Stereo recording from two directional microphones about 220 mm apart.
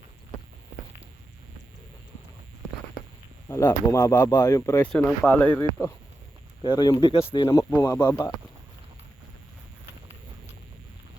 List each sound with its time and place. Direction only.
3.5 s speech: 15° left (ahead or behind)
6.6 s speech: 20° left (ahead or behind)
7.3 s speech: 10° left (ahead or behind)